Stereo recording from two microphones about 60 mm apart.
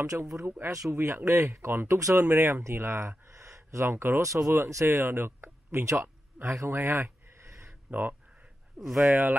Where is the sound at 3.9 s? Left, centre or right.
Right.